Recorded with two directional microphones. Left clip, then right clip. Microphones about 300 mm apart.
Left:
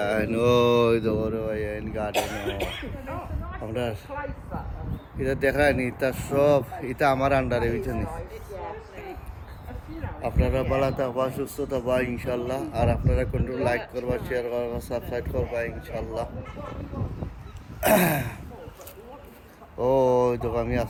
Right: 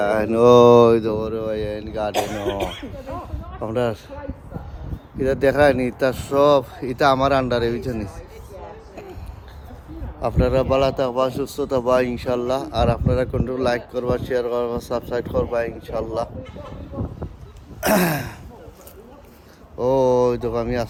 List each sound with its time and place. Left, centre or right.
0.0 s speech: centre
2.1 s speech: right
3.6 s speech: centre
5.2 s speech: centre
10.2 s speech: centre
11.3 s a man's voice: centre
11.6 s speech: centre
17.7 s speech: centre
19.8 s speech: centre